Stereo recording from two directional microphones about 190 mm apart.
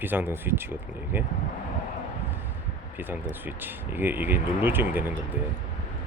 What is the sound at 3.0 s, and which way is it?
Speech, 10° right (ahead or behind).